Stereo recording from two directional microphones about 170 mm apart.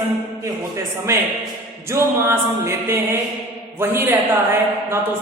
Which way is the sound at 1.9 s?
15° right (ahead or behind).